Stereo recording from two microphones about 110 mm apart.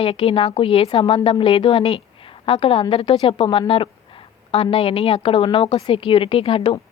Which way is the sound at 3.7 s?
50° left (ahead or behind).